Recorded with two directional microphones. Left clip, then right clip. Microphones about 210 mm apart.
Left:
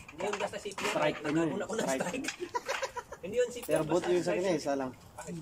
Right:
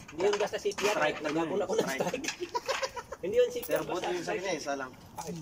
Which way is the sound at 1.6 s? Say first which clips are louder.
Right 4 dB; 15° right (ahead or behind).